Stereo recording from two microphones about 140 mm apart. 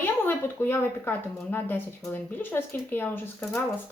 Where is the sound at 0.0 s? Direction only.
15° left (ahead or behind).